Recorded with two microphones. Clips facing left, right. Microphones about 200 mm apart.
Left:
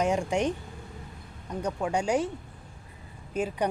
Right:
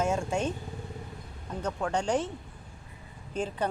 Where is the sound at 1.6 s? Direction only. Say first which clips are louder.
Left 1 dB; 10° left (ahead or behind).